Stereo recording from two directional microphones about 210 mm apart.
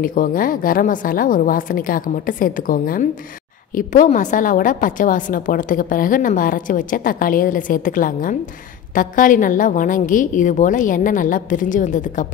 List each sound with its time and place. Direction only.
0.0 s a woman's voice: 40° left (ahead or behind)